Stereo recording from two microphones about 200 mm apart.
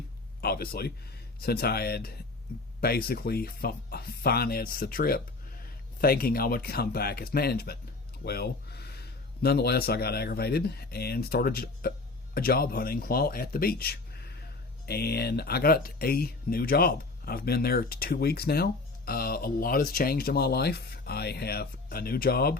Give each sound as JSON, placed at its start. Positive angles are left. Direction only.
{"t": 0.4, "sound": "speech", "side_deg": 50}